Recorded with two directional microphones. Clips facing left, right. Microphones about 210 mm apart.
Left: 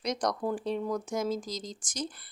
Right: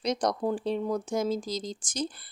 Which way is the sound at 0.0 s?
30° right (ahead or behind).